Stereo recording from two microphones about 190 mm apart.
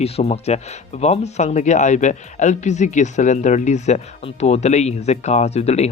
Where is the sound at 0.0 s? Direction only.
35° left (ahead or behind).